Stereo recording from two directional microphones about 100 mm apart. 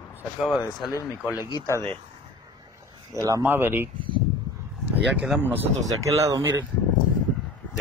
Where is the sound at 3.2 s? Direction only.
35° right (ahead or behind).